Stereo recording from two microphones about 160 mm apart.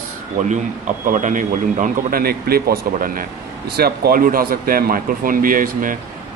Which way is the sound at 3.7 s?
80° right.